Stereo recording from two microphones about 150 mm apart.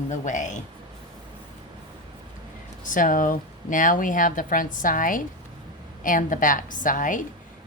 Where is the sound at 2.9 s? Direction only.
65° left (ahead or behind).